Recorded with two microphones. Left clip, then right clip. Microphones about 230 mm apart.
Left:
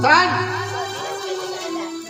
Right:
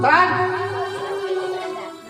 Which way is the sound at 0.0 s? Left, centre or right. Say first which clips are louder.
Even; left.